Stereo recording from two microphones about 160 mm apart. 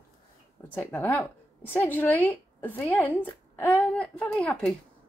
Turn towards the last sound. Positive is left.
turn(degrees=5)  # may be behind; listen again after turning